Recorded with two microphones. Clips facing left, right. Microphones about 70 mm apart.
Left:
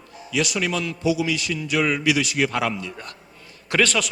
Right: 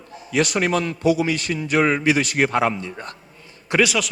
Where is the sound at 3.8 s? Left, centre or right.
Centre.